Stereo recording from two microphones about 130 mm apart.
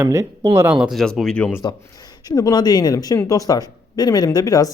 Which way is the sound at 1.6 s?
30° left (ahead or behind).